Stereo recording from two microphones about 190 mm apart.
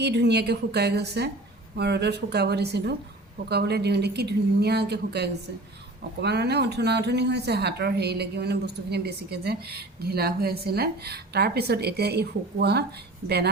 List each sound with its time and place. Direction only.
0.0 s a woman's voice: 60° right (ahead or behind)